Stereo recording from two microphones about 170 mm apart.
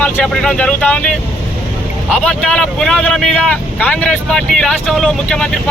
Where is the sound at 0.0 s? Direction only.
5° left (ahead or behind).